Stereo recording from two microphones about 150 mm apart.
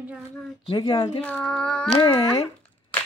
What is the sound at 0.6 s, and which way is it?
Speech, 30° left (ahead or behind).